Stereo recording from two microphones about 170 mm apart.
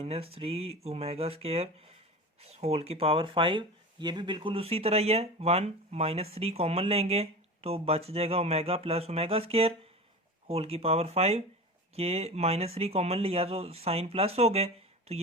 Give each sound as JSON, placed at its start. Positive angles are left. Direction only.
{"t": 0.0, "sound": "speech", "side_deg": -35}